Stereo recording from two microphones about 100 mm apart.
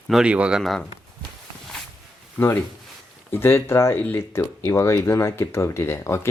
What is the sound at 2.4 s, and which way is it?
Speech, 20° left (ahead or behind).